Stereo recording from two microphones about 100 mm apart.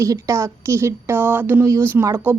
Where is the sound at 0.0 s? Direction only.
30° right (ahead or behind).